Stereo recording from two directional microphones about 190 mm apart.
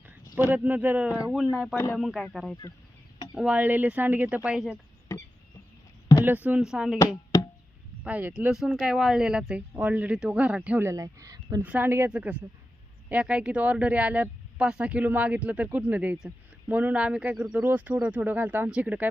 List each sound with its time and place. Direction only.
0.3 s speech: 10° right (ahead or behind)
1.7 s speech: 15° left (ahead or behind)
2.0 s speech: centre (ahead or behind)
6.2 s speech: 10° right (ahead or behind)
8.0 s speech: 10° right (ahead or behind)
11.6 s speech: 10° right (ahead or behind)